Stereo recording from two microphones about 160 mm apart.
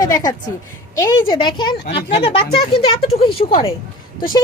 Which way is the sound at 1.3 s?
30° left (ahead or behind).